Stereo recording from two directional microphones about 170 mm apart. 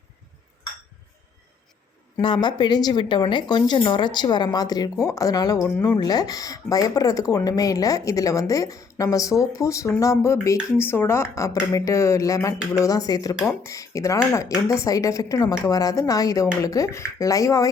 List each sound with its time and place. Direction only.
2.2 s speech: 25° left (ahead or behind)
5.7 s speech: 10° left (ahead or behind)
6.0 s speech: 25° left (ahead or behind)